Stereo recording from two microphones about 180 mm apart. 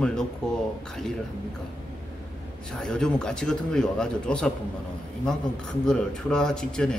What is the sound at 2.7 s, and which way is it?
Speech, 5° left (ahead or behind).